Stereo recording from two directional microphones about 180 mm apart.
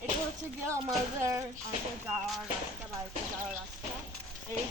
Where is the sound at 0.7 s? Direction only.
15° right (ahead or behind).